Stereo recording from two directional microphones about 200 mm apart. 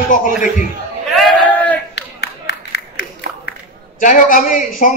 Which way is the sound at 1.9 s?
60° left (ahead or behind).